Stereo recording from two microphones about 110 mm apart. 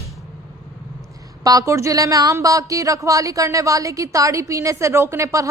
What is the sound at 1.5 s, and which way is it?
A man's voice, 30° right (ahead or behind).